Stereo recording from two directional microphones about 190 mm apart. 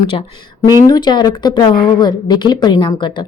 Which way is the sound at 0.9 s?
20° left (ahead or behind).